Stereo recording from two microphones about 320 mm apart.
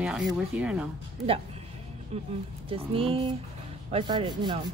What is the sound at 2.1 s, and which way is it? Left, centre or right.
Speech, centre.